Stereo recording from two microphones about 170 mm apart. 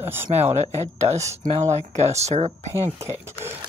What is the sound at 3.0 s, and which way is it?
Speech, 15° right (ahead or behind).